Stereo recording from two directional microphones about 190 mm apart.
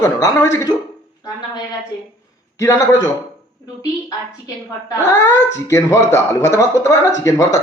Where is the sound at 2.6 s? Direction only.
15° left (ahead or behind).